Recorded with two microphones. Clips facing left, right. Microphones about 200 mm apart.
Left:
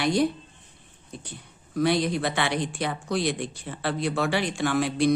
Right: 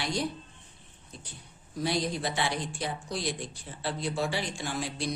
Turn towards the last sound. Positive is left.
turn(degrees=65)  # may be behind; listen again after turning